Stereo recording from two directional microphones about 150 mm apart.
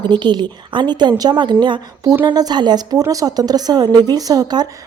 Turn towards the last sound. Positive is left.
turn(degrees=-25)  # may be behind; listen again after turning